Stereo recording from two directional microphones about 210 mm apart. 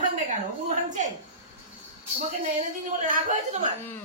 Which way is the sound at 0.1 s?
35° right (ahead or behind).